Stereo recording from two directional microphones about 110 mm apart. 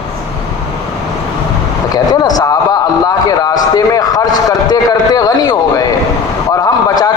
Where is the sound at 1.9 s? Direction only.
40° left (ahead or behind).